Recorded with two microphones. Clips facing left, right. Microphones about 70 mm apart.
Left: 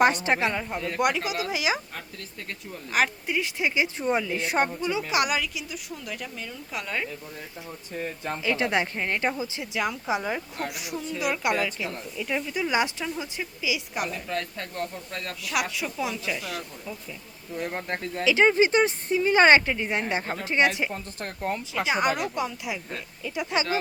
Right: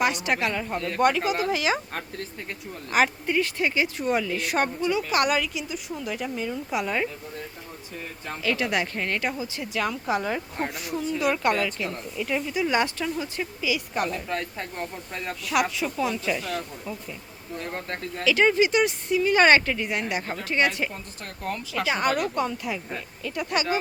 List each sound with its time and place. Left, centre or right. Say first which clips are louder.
0.0 s speech: left 3 dB; left
0.5 s speech: right 1 dB; centre
1.9 s speech: right 6 dB; right
2.9 s a woman's voice: right 3 dB; centre
3.4 s speech: right 1 dB; centre
5.2 s a woman's voice: right 3 dB; centre
8.2 s speech: even; left
10.9 s a woman's voice: right 4 dB; centre
12.7 s speech: even; centre
14.6 s speech: even; centre
15.4 s a woman's voice: right 4 dB; centre
17.6 s speech: left 2 dB; centre